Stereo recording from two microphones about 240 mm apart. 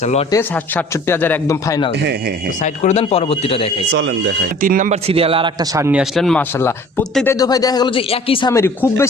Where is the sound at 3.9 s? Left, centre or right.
Right.